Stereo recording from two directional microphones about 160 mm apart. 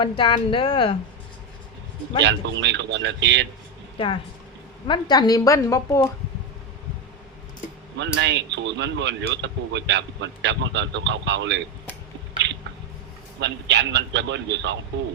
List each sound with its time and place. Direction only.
0.0 s speech: 30° left (ahead or behind)
2.2 s speech: 90° right
3.9 s a woman's voice: 30° left (ahead or behind)
7.9 s speech: 90° right
13.4 s speech: 90° right